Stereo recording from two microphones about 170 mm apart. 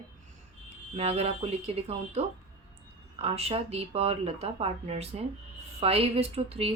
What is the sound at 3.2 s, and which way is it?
Speech, 35° right (ahead or behind).